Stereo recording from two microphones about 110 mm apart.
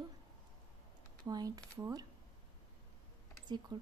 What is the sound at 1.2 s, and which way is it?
Speech, 35° right (ahead or behind).